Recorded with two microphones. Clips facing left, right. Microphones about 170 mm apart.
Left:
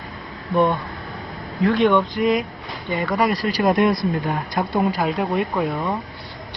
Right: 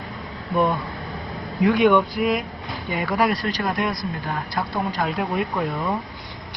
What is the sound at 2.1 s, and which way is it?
Speech, centre (ahead or behind).